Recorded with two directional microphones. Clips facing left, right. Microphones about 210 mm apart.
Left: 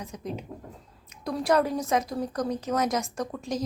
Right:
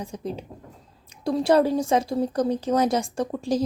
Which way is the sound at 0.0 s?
30° right (ahead or behind).